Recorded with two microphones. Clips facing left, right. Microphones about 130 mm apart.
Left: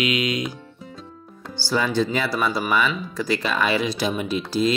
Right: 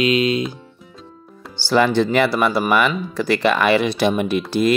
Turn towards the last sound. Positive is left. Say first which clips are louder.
# right 4 dB
turn(degrees=-60)  # may be behind; listen again after turning